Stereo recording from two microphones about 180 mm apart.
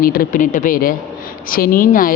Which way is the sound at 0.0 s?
55° left (ahead or behind).